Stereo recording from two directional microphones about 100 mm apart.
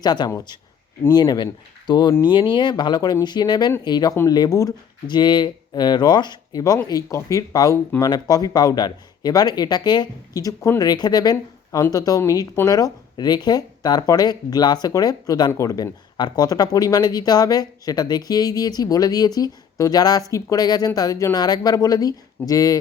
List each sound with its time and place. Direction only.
0.0 s speech: 45° left (ahead or behind)
5.0 s speech: 50° left (ahead or behind)